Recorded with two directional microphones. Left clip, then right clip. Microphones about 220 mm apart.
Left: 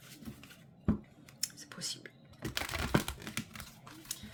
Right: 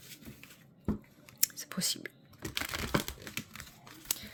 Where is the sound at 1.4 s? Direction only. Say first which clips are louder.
Right 6 dB; 50° right (ahead or behind).